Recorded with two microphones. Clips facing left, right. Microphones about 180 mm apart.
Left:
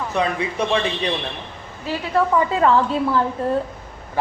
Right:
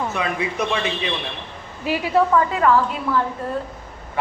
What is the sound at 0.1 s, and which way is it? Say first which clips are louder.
A man's voice: left 2 dB; 35° left (ahead or behind).